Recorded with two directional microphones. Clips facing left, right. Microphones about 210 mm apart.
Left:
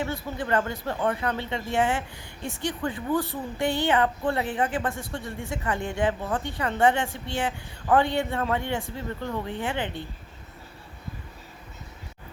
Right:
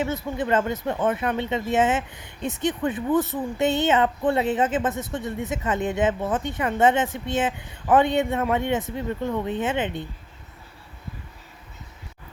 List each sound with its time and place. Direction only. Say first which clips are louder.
0.0 s speech: right 4 dB; 20° right (ahead or behind)